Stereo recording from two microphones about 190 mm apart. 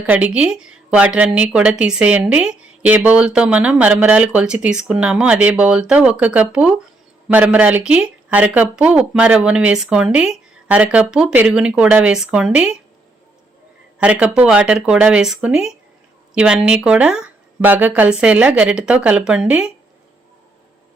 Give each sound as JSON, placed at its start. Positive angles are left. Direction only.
{"t": 0.0, "sound": "speech", "side_deg": -10}
{"t": 14.0, "sound": "speech", "side_deg": -5}